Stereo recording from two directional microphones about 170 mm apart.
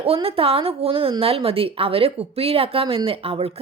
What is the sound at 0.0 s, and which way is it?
A woman's voice, 35° right (ahead or behind).